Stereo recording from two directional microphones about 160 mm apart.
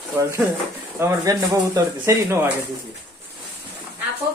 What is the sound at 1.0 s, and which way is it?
Speech, 20° right (ahead or behind).